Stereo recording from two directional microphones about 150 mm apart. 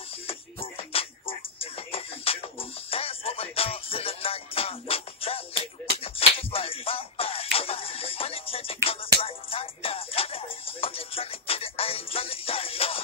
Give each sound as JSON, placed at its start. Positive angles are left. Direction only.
{"t": 0.3, "sound": "music", "side_deg": 40}